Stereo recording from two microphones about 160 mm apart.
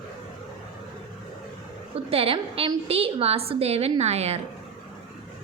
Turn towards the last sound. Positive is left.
turn(degrees=-40)  # may be behind; listen again after turning